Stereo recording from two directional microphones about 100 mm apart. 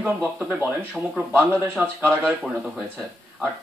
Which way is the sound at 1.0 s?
Centre (ahead or behind).